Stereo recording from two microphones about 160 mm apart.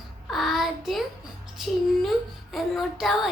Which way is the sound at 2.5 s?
Centre (ahead or behind).